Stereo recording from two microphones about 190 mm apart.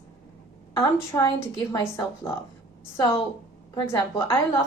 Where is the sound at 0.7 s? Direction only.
15° left (ahead or behind).